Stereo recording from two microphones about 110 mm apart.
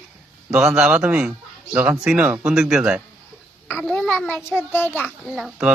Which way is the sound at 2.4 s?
5° right (ahead or behind).